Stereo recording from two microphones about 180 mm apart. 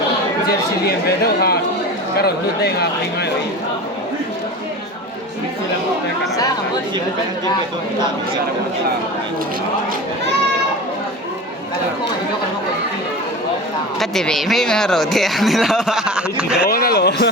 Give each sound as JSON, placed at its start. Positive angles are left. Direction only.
{"t": 0.4, "sound": "speech", "side_deg": 60}
{"t": 14.0, "sound": "speech", "side_deg": 0}
{"t": 16.6, "sound": "speech", "side_deg": 55}